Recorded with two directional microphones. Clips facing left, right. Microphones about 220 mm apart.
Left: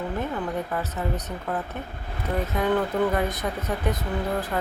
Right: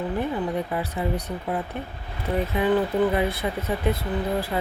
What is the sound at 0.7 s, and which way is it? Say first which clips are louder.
Speech: right 2 dB; 15° right (ahead or behind).